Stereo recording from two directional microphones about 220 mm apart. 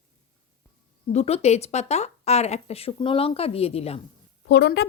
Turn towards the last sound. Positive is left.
turn(degrees=50)  # may be behind; listen again after turning